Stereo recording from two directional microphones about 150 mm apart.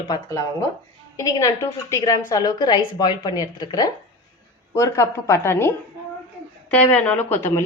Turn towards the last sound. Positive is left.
turn(degrees=15)  # may be behind; listen again after turning